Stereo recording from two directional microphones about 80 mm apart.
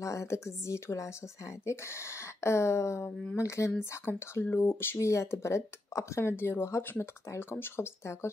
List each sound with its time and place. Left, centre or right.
0.0 s speech: left
2.4 s speech: left
3.7 s speech: left